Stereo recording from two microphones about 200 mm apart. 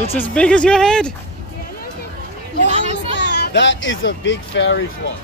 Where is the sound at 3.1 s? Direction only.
60° left (ahead or behind).